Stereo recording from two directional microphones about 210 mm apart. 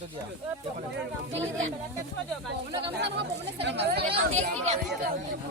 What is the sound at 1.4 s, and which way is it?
Speech, 65° right (ahead or behind).